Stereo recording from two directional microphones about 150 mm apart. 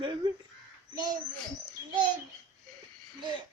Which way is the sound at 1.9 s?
30° right (ahead or behind).